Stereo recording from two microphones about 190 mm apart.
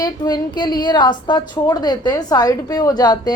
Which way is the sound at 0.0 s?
20° left (ahead or behind).